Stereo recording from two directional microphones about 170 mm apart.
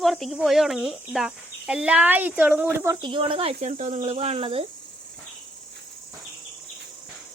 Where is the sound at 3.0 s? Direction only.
30° right (ahead or behind).